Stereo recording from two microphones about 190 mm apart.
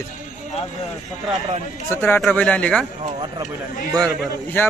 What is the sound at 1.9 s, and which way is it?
Speech, 10° left (ahead or behind).